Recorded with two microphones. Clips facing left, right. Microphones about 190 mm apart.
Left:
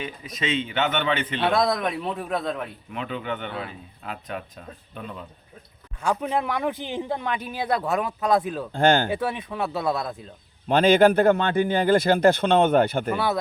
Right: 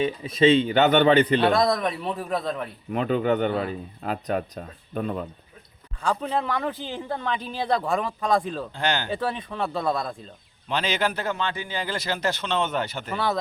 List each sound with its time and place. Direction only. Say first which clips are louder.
0.0 s a man's voice: right 11 dB; 30° right (ahead or behind)
1.4 s a man's voice: right 2 dB; centre (ahead or behind)
2.9 s a man's voice: right 9 dB; 45° right (ahead or behind)
6.0 s speech: left 1 dB; 10° left (ahead or behind)
8.7 s speech: left 9 dB; 50° left (ahead or behind)
9.0 s a man's voice: left 1 dB; 10° left (ahead or behind)
10.7 s a man's voice: left 10 dB; 55° left (ahead or behind)
13.1 s a man's voice: right 2 dB; 5° left (ahead or behind)